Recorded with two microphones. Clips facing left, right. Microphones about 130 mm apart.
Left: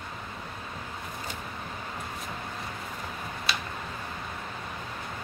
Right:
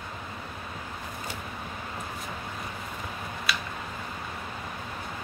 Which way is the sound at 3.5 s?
25° left (ahead or behind).